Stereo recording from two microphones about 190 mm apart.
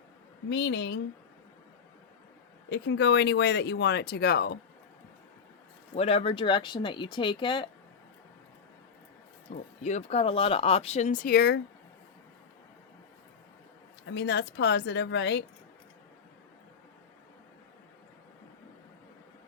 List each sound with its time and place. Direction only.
0.5 s speech: 70° left (ahead or behind)
2.6 s speech: 70° left (ahead or behind)
5.9 s speech: 30° left (ahead or behind)
9.5 s speech: 35° left (ahead or behind); by 11.6 s 60° left (ahead or behind)
14.1 s speech: 65° left (ahead or behind)